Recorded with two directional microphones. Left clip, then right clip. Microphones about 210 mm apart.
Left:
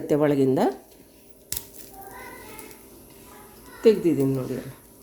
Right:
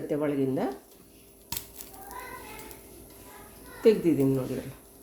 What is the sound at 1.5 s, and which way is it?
Fowl, 15° right (ahead or behind).